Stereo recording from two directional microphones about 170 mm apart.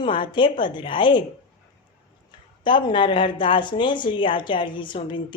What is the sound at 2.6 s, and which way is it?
Speech, 30° left (ahead or behind).